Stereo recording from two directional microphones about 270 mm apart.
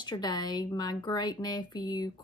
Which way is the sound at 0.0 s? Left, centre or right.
Centre.